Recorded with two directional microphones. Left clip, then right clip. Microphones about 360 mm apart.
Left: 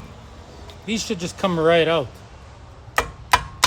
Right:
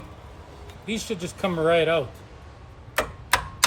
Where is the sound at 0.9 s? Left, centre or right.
Centre.